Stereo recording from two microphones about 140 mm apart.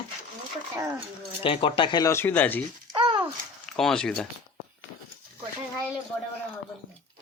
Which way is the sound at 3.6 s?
5° left (ahead or behind).